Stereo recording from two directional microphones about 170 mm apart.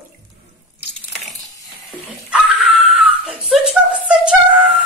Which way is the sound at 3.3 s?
Centre (ahead or behind).